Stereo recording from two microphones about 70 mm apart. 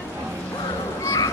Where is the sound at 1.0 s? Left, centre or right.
Left.